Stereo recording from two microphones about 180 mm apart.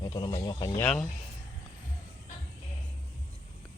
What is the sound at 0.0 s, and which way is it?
Speech, 25° left (ahead or behind).